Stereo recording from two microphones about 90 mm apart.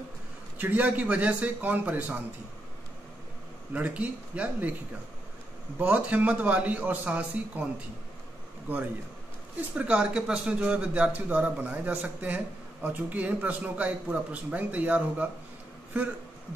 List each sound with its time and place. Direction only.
0.6 s speech: 20° right (ahead or behind)
3.7 s speech: 15° right (ahead or behind)
5.8 s speech: 15° right (ahead or behind)
8.7 s a man's voice: 20° right (ahead or behind)